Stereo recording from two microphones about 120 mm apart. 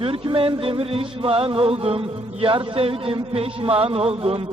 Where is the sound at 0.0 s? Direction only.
50° right (ahead or behind).